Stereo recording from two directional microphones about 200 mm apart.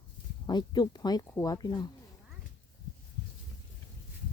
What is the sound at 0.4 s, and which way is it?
Speech, 20° left (ahead or behind).